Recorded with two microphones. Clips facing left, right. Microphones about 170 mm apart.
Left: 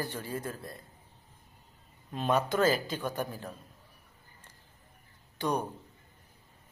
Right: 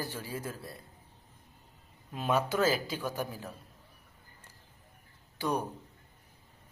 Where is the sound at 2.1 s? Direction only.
5° right (ahead or behind).